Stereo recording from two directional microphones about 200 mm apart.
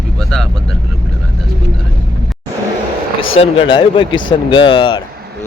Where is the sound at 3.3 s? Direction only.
30° left (ahead or behind).